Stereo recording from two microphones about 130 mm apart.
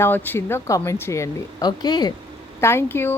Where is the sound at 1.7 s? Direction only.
30° left (ahead or behind).